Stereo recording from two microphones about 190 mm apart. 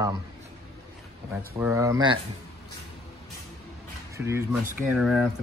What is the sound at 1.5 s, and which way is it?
Speech, 15° right (ahead or behind).